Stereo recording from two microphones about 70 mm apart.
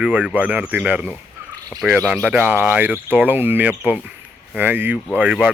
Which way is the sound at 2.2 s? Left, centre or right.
Right.